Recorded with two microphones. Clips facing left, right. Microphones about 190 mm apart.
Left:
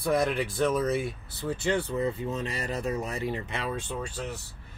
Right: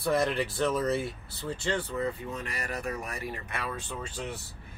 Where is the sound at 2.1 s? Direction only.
25° left (ahead or behind).